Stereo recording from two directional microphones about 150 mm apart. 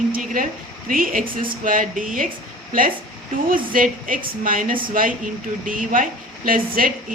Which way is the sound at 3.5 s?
65° right (ahead or behind).